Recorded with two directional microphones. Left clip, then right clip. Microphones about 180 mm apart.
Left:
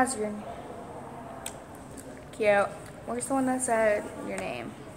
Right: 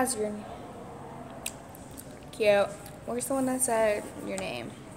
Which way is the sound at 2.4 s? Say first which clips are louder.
Even; 35° right (ahead or behind).